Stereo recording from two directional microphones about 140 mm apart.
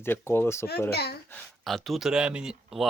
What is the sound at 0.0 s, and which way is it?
Speech, 15° left (ahead or behind).